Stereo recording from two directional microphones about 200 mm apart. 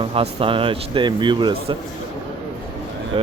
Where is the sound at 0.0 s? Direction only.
30° right (ahead or behind).